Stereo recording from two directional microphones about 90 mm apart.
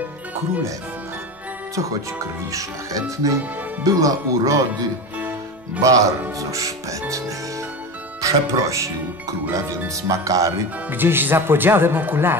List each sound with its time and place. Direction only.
1.8 s speech: 40° right (ahead or behind)
10.0 s speech: 40° right (ahead or behind)
10.9 s speech: 25° right (ahead or behind)